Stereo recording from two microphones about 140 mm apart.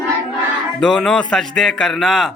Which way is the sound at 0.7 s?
5° left (ahead or behind).